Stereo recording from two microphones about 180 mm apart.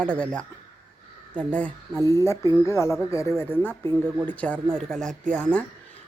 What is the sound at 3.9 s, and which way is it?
Speech, 25° right (ahead or behind).